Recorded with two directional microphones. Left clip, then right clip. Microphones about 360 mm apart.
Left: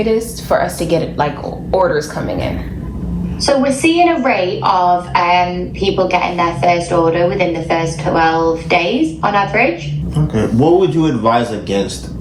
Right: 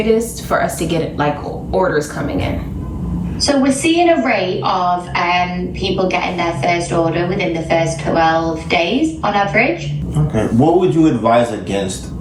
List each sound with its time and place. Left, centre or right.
0.0 s a woman's voice: centre
10.3 s a man's voice: centre